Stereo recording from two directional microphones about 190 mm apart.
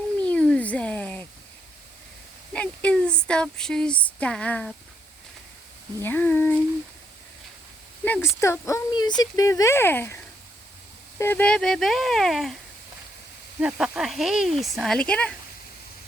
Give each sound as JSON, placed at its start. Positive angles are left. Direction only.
{"t": 0.2, "sound": "a sound", "side_deg": 5}
{"t": 2.5, "sound": "speech", "side_deg": 5}
{"t": 6.0, "sound": "speech", "side_deg": 10}
{"t": 8.0, "sound": "speech", "side_deg": 10}
{"t": 11.2, "sound": "speech", "side_deg": 10}
{"t": 13.6, "sound": "speech", "side_deg": -5}